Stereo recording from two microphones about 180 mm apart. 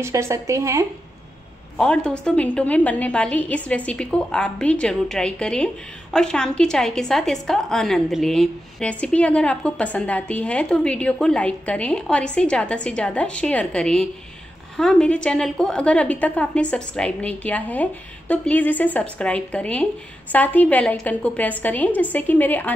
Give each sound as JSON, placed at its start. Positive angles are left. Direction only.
{"t": 0.0, "sound": "a woman's voice", "side_deg": -15}
{"t": 1.8, "sound": "a woman's voice", "side_deg": 5}